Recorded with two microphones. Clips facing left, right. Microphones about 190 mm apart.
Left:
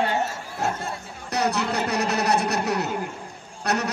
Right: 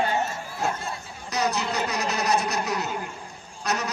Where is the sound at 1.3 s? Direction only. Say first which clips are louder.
Left 2 dB; 65° left (ahead or behind).